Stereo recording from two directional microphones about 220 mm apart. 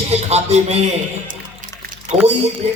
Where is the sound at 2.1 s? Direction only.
30° right (ahead or behind).